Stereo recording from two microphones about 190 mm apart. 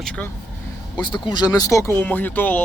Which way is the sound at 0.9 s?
25° left (ahead or behind).